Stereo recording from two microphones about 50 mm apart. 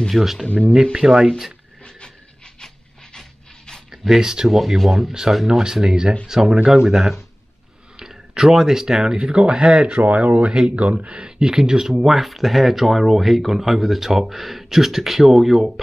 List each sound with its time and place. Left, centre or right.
0.1 s speech: centre
1.9 s pant: centre
3.9 s speech: centre; by 11.2 s right
11.2 s speech: centre